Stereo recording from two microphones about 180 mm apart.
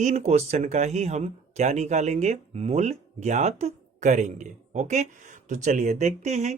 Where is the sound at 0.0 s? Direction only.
40° right (ahead or behind).